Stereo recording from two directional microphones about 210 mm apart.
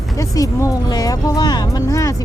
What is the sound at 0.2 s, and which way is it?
Speech, 15° left (ahead or behind).